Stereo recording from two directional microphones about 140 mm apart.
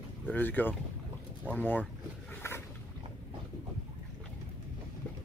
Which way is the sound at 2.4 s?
20° left (ahead or behind).